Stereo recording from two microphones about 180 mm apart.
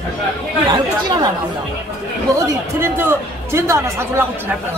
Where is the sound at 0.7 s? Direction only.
25° right (ahead or behind).